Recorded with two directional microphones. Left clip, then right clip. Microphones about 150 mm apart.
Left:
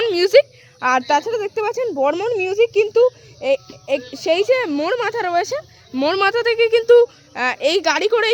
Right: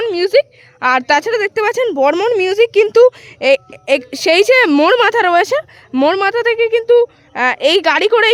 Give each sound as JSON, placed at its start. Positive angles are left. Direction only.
{"t": 0.0, "sound": "a sound", "side_deg": -10}
{"t": 2.0, "sound": "a woman's voice", "side_deg": -40}
{"t": 2.5, "sound": "speech", "side_deg": -25}
{"t": 2.9, "sound": "a woman's voice", "side_deg": -40}
{"t": 5.0, "sound": "speech", "side_deg": -30}
{"t": 6.1, "sound": "speech", "side_deg": -15}
{"t": 6.8, "sound": "speech", "side_deg": 5}
{"t": 7.3, "sound": "speech", "side_deg": -20}